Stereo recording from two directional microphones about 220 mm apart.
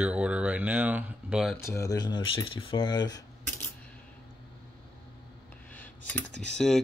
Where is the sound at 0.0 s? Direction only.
5° right (ahead or behind).